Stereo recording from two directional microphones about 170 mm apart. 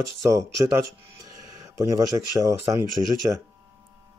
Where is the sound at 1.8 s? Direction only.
20° right (ahead or behind).